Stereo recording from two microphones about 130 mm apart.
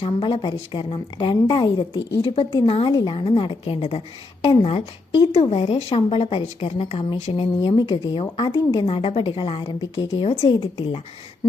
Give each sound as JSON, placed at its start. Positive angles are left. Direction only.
{"t": 0.0, "sound": "a woman's voice", "side_deg": 45}